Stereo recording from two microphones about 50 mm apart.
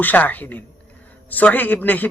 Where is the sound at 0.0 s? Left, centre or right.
Left.